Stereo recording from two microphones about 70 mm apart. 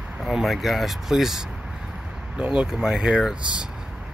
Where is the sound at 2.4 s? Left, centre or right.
Centre.